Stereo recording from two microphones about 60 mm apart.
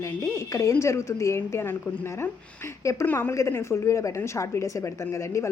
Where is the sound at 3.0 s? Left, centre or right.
Left.